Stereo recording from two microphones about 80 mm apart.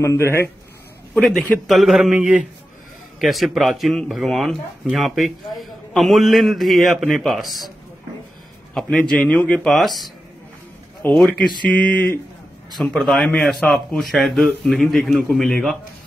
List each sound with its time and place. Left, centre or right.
0.0 s speech: left
1.7 s speech: centre
8.7 s a man's voice: centre
9.7 s speech: centre
11.1 s a man's voice: centre
12.9 s speech: centre